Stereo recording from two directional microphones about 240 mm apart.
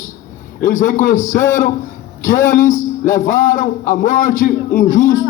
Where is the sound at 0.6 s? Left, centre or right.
Left.